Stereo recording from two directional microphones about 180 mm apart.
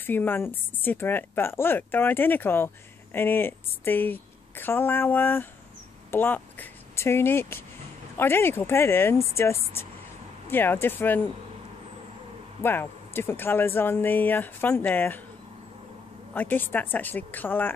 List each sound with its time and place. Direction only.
0.0 s a woman's voice: 10° left (ahead or behind)
12.6 s a woman's voice: 10° left (ahead or behind)
16.3 s a woman's voice: 10° left (ahead or behind)